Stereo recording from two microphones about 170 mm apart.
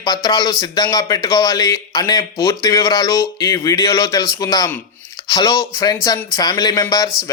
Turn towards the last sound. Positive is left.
turn(degrees=20)  # may be behind; listen again after turning